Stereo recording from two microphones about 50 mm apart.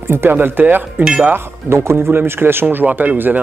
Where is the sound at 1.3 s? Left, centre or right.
Right.